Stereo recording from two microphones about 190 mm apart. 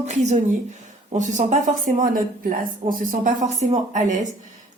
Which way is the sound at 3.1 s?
40° right (ahead or behind).